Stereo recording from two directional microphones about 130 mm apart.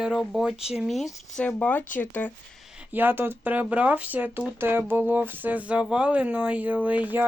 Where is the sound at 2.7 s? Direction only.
10° right (ahead or behind).